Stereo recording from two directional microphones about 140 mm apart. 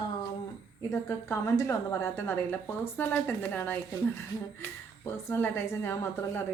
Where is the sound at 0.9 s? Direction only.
20° left (ahead or behind).